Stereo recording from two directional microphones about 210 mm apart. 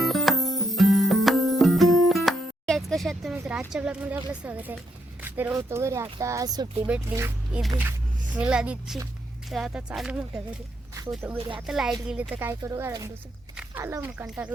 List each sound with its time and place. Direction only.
0.0 s music: centre (ahead or behind)
4.3 s speech: 5° right (ahead or behind)
6.8 s speech: 5° right (ahead or behind)
11.3 s speech: 25° right (ahead or behind)
11.6 s speech: centre (ahead or behind)